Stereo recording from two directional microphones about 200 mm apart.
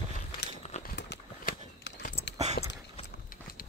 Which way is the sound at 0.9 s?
60° left (ahead or behind).